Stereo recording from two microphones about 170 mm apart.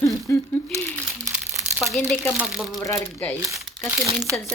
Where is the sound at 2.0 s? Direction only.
10° left (ahead or behind).